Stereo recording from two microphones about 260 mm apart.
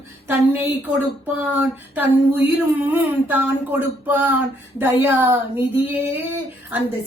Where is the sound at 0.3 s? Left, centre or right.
Centre.